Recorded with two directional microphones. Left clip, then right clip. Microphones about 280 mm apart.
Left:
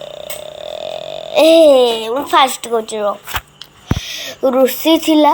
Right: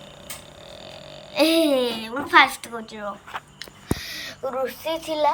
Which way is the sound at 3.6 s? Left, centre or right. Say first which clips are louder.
Left 6 dB; centre.